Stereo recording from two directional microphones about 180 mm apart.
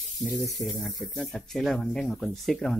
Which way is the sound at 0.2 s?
Centre (ahead or behind).